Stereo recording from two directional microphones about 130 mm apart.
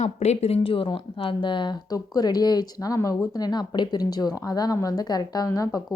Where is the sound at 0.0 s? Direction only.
55° left (ahead or behind).